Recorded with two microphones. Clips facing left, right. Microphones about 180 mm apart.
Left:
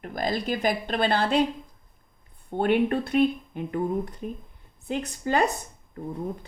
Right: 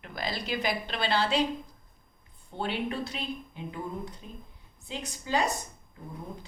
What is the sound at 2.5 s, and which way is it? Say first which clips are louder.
A woman's voice: left 10 dB; 55° left (ahead or behind).